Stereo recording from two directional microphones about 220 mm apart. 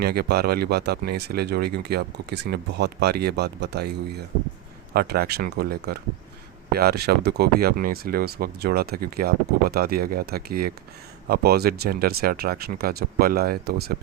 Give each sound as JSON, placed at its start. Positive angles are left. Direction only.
{"t": 0.0, "sound": "speech", "side_deg": -45}